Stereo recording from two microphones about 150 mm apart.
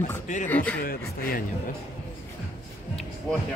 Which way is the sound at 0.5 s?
10° left (ahead or behind).